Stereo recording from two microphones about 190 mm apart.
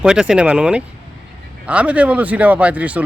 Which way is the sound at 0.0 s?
5° right (ahead or behind).